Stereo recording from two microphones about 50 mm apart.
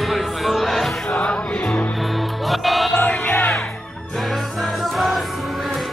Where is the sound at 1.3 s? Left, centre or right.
Left.